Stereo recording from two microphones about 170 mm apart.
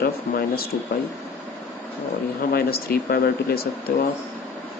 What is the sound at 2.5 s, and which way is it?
Speech, 65° left (ahead or behind).